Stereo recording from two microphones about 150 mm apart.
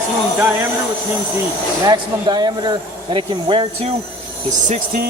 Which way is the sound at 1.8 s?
30° right (ahead or behind).